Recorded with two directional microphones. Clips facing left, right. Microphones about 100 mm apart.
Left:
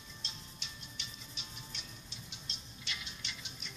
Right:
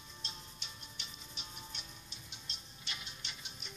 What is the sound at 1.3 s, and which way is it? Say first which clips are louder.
Music: even; 45° right (ahead or behind).